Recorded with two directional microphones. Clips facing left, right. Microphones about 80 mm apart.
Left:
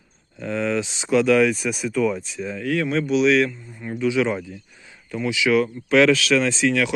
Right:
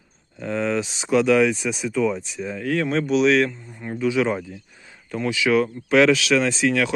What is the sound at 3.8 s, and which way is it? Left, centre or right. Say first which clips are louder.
Speech: even; right.